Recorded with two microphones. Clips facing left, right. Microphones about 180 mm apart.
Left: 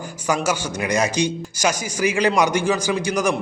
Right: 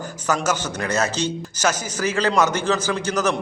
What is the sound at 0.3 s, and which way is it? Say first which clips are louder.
Speech: left 1 dB; 10° left (ahead or behind).